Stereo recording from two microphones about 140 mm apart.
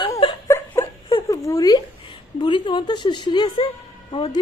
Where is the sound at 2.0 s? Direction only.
35° left (ahead or behind).